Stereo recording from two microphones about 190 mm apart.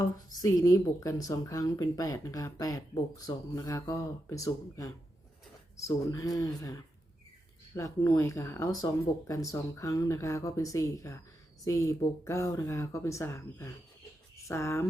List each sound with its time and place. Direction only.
0.0 s speech: 20° left (ahead or behind)